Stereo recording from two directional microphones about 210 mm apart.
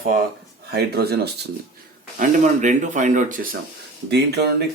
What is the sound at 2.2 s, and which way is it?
Speech, 35° right (ahead or behind).